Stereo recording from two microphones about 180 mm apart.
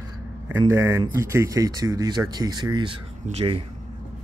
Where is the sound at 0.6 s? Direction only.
15° right (ahead or behind); by 3.6 s 35° right (ahead or behind).